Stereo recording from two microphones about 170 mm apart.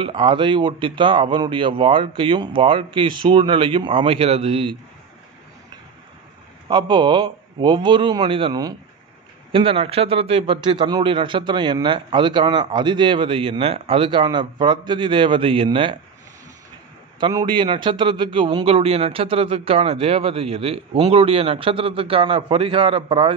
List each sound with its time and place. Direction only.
0.0 s a man's voice: 30° right (ahead or behind)
6.7 s a man's voice: 25° right (ahead or behind)
17.2 s a man's voice: 25° right (ahead or behind)